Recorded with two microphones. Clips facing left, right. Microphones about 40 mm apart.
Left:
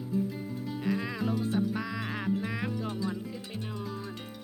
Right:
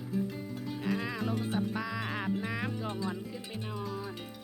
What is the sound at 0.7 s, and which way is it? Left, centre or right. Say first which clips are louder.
Music: left 2 dB; centre.